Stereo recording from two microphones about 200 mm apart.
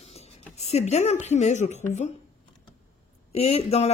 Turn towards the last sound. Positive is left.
turn(degrees=30)  # may be behind; listen again after turning